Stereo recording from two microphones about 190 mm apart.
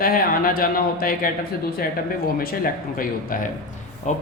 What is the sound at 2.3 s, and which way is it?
Speech, 50° left (ahead or behind).